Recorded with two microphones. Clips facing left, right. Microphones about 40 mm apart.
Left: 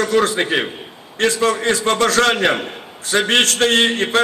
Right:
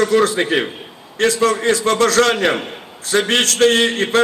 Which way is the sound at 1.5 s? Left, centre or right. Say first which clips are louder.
Right 1 dB; left.